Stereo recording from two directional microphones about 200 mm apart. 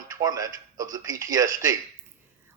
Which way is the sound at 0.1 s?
15° right (ahead or behind).